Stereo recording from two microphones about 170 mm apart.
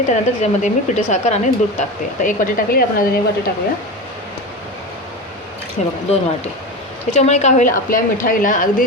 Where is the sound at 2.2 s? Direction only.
55° left (ahead or behind).